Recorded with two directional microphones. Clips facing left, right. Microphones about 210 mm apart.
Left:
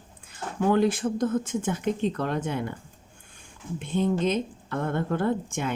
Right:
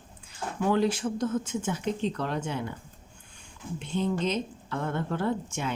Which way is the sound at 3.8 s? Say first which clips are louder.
Left 4 dB; 50° left (ahead or behind).